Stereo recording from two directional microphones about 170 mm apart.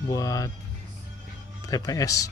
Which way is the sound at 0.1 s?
20° left (ahead or behind).